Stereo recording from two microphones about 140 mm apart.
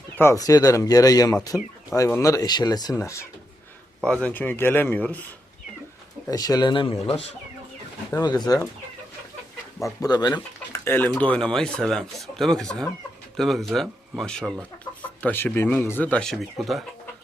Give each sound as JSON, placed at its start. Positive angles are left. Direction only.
{"t": 0.2, "sound": "speech", "side_deg": 20}
{"t": 4.0, "sound": "speech", "side_deg": 10}
{"t": 6.3, "sound": "speech", "side_deg": 25}
{"t": 8.2, "sound": "speech", "side_deg": 30}
{"t": 9.8, "sound": "speech", "side_deg": 25}
{"t": 10.7, "sound": "speech", "side_deg": 15}
{"t": 14.9, "sound": "chicken", "side_deg": 30}
{"t": 15.2, "sound": "speech", "side_deg": 10}